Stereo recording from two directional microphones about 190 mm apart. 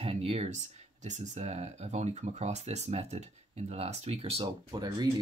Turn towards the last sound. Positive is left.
turn(degrees=-20)  # may be behind; listen again after turning